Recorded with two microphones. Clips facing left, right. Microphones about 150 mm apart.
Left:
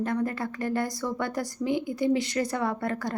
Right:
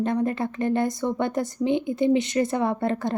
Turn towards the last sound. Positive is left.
turn(degrees=-25)  # may be behind; listen again after turning